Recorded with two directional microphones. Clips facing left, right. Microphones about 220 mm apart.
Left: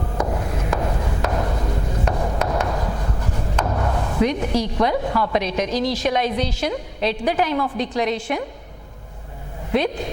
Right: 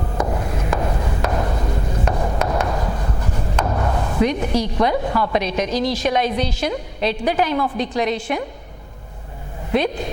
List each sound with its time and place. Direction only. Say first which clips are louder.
0.2 s a sound: right 1 dB; 25° right (ahead or behind)
3.5 s chop: right 1 dB; 20° right (ahead or behind)
4.3 s a woman's voice: right 1 dB; 10° right (ahead or behind)
9.7 s a woman's voice: right 1 dB; 10° right (ahead or behind)